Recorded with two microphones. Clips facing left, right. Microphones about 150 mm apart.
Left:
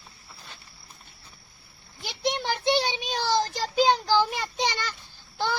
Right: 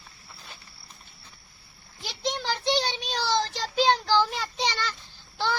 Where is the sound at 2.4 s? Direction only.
10° left (ahead or behind).